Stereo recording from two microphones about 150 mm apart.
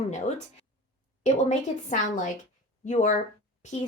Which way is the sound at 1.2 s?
50° left (ahead or behind).